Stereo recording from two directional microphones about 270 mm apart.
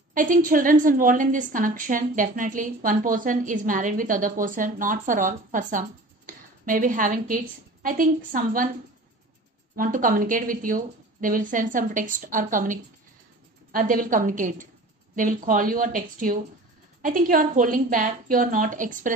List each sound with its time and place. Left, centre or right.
0.1 s a woman's voice: right
9.8 s a woman's voice: right